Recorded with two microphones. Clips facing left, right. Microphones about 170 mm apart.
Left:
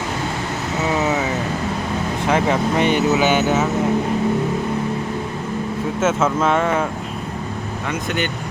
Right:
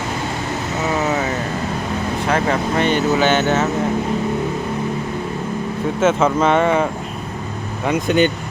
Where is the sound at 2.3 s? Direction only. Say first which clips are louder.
Left 1 dB; 15° left (ahead or behind).